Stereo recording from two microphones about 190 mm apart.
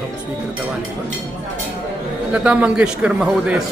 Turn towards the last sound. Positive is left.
turn(degrees=-5)  # may be behind; listen again after turning